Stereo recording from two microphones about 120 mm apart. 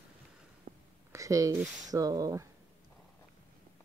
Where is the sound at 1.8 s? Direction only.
30° right (ahead or behind).